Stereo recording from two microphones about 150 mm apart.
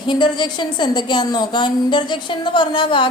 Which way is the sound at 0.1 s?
30° left (ahead or behind).